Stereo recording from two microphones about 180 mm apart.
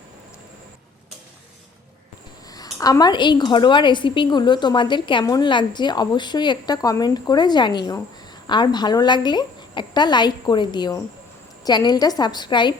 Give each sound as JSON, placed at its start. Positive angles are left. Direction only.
{"t": 2.5, "sound": "a woman's voice", "side_deg": 20}